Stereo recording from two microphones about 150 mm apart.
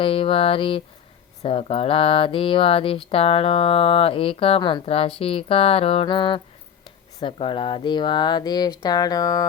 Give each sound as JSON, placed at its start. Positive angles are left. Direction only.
{"t": 0.0, "sound": "speech", "side_deg": 35}